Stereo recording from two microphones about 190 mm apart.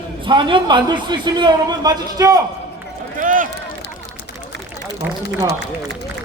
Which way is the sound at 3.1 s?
45° right (ahead or behind).